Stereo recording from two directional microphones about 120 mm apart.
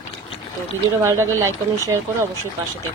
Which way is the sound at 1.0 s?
20° right (ahead or behind).